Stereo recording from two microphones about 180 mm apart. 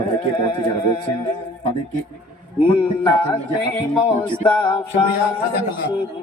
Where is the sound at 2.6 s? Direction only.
30° left (ahead or behind).